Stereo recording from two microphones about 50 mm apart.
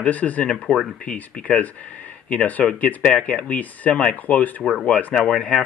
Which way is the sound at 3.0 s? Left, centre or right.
Centre.